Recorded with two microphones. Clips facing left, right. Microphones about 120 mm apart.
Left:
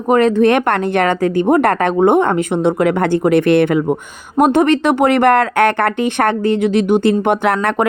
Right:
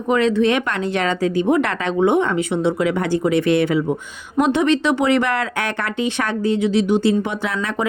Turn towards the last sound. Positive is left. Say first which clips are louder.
# left 7 dB
turn(degrees=60)  # may be behind; listen again after turning